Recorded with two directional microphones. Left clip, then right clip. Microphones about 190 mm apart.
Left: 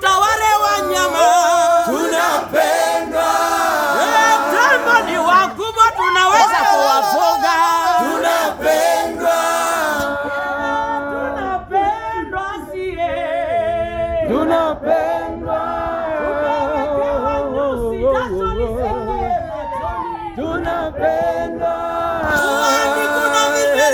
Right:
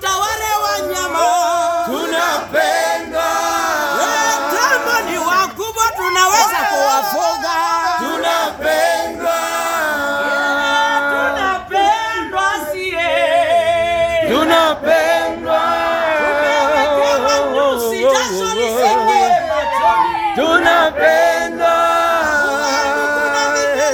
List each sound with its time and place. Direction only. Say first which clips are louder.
0.1 s a sound: left 4 dB; 5° right (ahead or behind)
1.2 s music: left 2 dB; 10° left (ahead or behind)
2.1 s choir: right 1 dB; centre (ahead or behind)
3.9 s music: left 5 dB; 25° right (ahead or behind)
4.9 s chatter: left 3 dB; 45° right (ahead or behind)
7.3 s a sound: left 2 dB; 55° left (ahead or behind)
8.6 s choir: even; 10° left (ahead or behind)
14.3 s a sound: right 4 dB; 5° right (ahead or behind)
16.4 s music: right 4 dB; 10° right (ahead or behind)
20.5 s choir: right 9 dB; 5° right (ahead or behind)
22.8 s music: even; centre (ahead or behind)